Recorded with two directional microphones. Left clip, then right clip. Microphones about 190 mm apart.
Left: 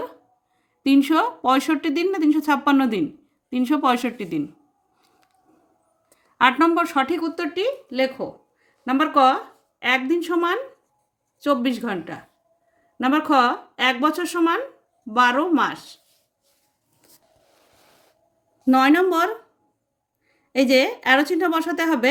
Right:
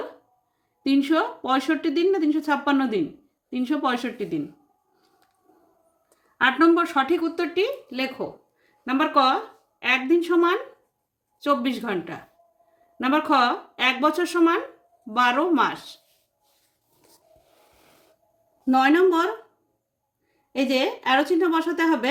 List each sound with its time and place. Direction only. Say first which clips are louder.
0.8 s speech: left 3 dB; 40° left (ahead or behind)
6.3 s speech: left 1 dB; 35° left (ahead or behind); by 16.0 s 20° left (ahead or behind)
18.6 s a woman's voice: left 1 dB; 45° left (ahead or behind)
20.5 s a woman's voice: left 5 dB; 40° left (ahead or behind)